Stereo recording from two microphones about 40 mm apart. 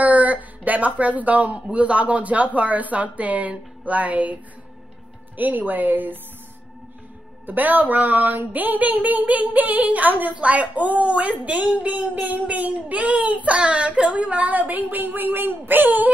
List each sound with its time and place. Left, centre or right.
0.0 s speech: right
7.4 s speech: right
10.3 s speech: right